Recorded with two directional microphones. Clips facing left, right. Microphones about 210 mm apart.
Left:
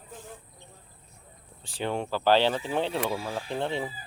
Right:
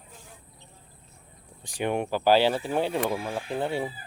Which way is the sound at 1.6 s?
15° right (ahead or behind).